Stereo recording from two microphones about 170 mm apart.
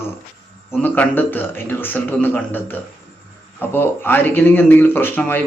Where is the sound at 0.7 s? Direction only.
10° left (ahead or behind).